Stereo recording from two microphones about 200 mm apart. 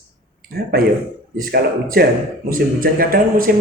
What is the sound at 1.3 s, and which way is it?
A man's voice, 50° right (ahead or behind).